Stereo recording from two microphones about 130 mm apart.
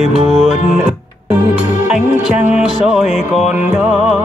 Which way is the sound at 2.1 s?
65° left (ahead or behind).